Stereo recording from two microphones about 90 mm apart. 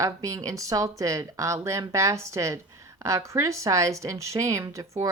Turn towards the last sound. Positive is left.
turn(degrees=-40)  # may be behind; listen again after turning